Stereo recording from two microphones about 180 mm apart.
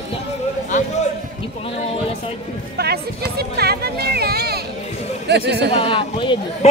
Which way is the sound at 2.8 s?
60° right (ahead or behind).